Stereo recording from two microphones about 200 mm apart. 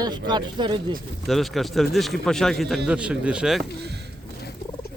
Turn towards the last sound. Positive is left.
turn(degrees=-5)  # may be behind; listen again after turning